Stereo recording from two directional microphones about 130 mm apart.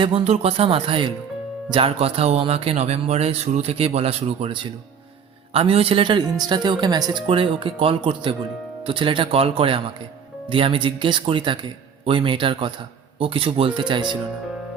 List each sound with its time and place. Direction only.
0.0 s speech: 45° right (ahead or behind)